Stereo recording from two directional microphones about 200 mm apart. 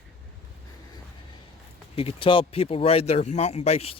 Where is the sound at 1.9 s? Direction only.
30° left (ahead or behind).